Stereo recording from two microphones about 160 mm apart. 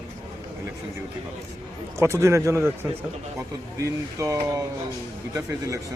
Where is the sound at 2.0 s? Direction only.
15° right (ahead or behind).